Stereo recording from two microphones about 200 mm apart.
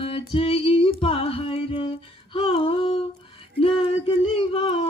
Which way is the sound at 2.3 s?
25° left (ahead or behind).